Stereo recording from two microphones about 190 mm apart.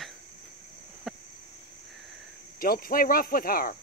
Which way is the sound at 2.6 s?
50° left (ahead or behind).